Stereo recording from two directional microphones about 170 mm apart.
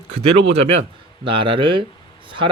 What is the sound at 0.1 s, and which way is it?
Speech, 35° right (ahead or behind).